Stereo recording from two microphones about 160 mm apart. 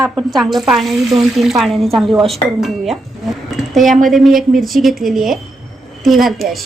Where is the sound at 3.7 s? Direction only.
Centre (ahead or behind).